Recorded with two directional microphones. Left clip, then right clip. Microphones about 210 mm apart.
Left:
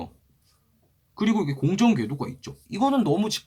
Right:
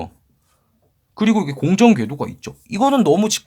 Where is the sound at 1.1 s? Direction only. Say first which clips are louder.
Right 6 dB; 50° right (ahead or behind).